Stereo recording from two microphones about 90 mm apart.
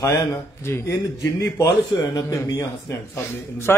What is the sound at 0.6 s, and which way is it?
Speech, 25° left (ahead or behind).